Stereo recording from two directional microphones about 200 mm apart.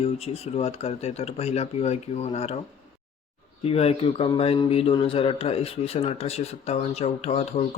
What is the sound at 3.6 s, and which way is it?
Speech, 30° left (ahead or behind).